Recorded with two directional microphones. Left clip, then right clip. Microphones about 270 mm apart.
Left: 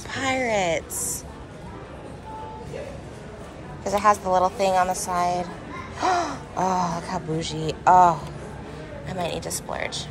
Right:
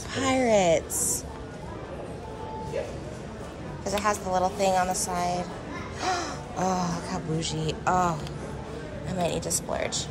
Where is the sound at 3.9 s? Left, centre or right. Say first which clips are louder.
Left 7 dB; centre.